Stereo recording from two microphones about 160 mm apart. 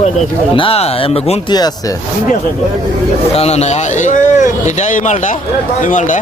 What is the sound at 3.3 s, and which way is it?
Speech, 40° left (ahead or behind).